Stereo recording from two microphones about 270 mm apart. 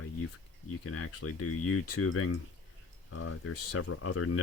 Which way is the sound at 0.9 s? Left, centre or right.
Left.